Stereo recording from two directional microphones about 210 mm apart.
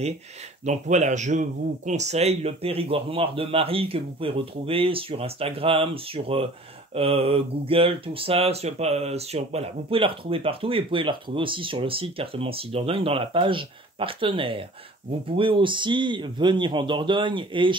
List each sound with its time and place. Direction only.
0.7 s speech: 35° right (ahead or behind)